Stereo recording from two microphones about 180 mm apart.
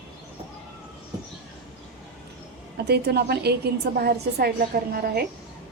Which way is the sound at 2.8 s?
65° right (ahead or behind).